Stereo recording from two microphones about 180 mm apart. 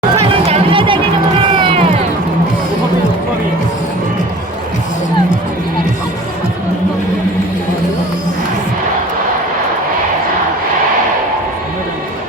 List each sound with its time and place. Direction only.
0.4 s music: 30° right (ahead or behind)
1.4 s run: 30° right (ahead or behind)